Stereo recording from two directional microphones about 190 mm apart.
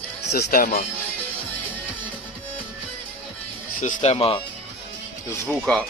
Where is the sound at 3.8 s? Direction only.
40° left (ahead or behind).